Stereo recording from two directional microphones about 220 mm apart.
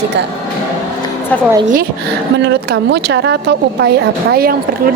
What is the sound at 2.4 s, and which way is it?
Speech, 50° right (ahead or behind).